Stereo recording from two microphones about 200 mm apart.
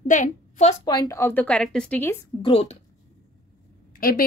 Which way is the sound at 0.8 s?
20° left (ahead or behind).